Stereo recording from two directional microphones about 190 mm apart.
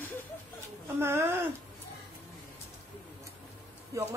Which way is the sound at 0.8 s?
10° right (ahead or behind).